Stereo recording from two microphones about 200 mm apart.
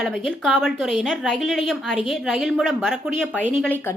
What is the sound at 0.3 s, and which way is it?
A woman's voice, centre (ahead or behind).